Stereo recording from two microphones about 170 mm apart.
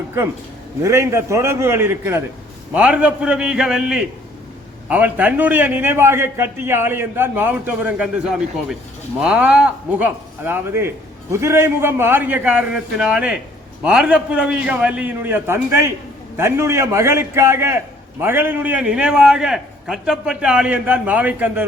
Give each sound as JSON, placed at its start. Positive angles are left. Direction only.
{"t": 0.8, "sound": "a man's voice", "side_deg": -15}